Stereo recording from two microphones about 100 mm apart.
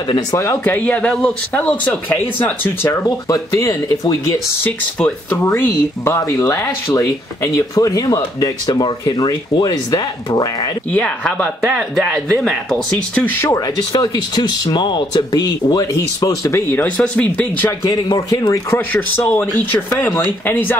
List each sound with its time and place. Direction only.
0.4 s speech: 30° left (ahead or behind)
0.7 s speech: 15° left (ahead or behind)
3.1 s speech: 35° left (ahead or behind)
4.6 s speech: 15° left (ahead or behind)
5.4 s speech: 25° left (ahead or behind); by 10.7 s 40° left (ahead or behind)
10.9 s speech: 15° left (ahead or behind)
13.2 s speech: 15° left (ahead or behind)
13.5 s speech: 40° left (ahead or behind)
16.8 s speech: 10° left (ahead or behind)
18.1 s speech: 40° left (ahead or behind)
18.8 s speech: 20° left (ahead or behind)